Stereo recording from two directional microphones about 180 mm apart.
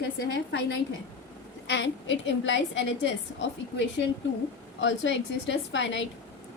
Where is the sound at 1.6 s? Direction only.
85° left.